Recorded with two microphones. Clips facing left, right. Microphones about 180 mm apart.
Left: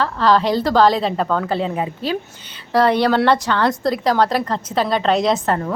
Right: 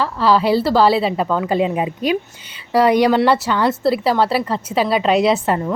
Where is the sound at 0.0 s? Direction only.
5° right (ahead or behind).